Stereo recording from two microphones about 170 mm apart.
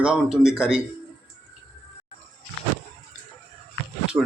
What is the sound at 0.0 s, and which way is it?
Speech, 5° right (ahead or behind).